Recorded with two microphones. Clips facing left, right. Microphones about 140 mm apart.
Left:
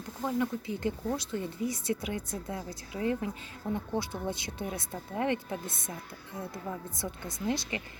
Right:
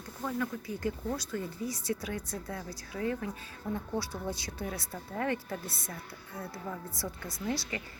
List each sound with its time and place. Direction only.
0.2 s speech: 20° left (ahead or behind)